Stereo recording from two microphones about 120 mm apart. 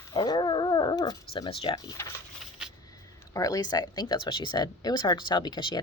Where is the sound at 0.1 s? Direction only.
40° left (ahead or behind).